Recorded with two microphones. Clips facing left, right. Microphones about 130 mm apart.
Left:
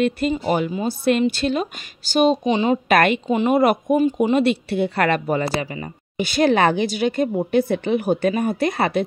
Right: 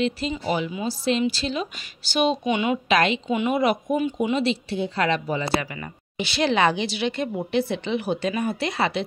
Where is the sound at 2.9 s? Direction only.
55° left (ahead or behind).